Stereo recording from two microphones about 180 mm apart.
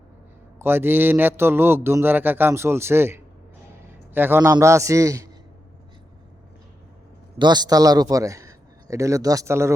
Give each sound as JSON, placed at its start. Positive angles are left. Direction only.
{"t": 0.6, "sound": "a man's voice", "side_deg": -10}
{"t": 7.3, "sound": "a man's voice", "side_deg": -25}